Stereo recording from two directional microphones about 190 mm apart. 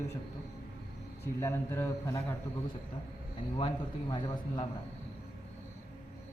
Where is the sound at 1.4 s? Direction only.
15° left (ahead or behind).